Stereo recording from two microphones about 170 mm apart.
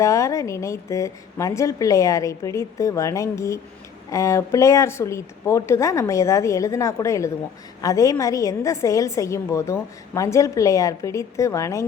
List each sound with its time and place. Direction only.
0.0 s a woman's voice: 20° left (ahead or behind)